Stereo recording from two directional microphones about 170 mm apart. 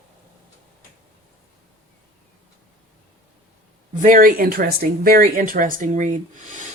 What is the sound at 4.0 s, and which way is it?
Speech, 55° right (ahead or behind).